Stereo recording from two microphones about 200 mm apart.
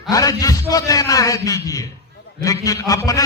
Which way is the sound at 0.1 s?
15° left (ahead or behind).